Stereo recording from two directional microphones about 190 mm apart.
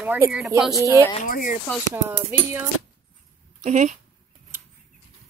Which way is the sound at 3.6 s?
40° right (ahead or behind).